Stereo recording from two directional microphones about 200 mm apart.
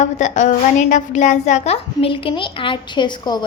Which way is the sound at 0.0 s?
35° left (ahead or behind).